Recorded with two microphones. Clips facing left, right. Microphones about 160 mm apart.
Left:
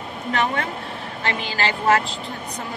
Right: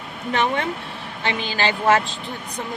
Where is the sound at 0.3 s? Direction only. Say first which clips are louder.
Right 2 dB; 25° right (ahead or behind).